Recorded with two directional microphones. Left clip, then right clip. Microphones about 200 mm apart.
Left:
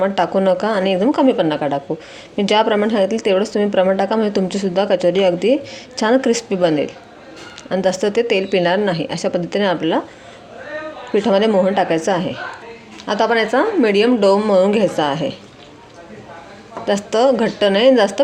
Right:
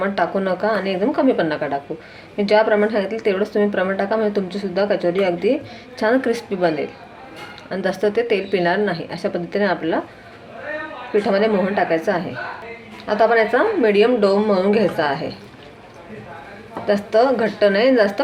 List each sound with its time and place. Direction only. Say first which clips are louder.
0.0 s a woman's voice: left 4 dB; 40° left (ahead or behind)
11.1 s a woman's voice: left 3 dB; 50° left (ahead or behind)
16.8 s a woman's voice: left 1 dB; 45° left (ahead or behind)